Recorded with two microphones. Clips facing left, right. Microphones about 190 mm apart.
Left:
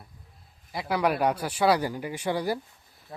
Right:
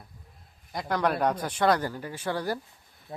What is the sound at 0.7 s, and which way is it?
Speech, 5° left (ahead or behind).